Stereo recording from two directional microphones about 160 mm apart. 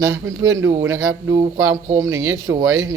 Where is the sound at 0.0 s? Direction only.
15° right (ahead or behind).